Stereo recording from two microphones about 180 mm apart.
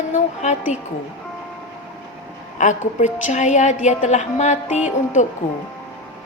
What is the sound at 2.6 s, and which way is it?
A woman's voice, 45° left (ahead or behind).